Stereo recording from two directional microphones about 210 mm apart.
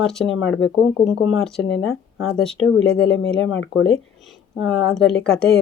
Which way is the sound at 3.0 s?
60° left (ahead or behind).